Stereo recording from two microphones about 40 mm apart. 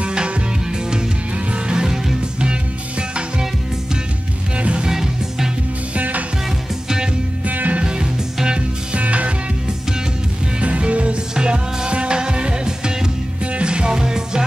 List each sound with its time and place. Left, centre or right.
0.0 s music: right
3.0 s music: right
4.6 s music: right
4.8 s music: centre
5.9 s music: right
7.4 s music: right
7.8 s music: centre
9.0 s music: right
10.6 s music: right
13.4 s music: right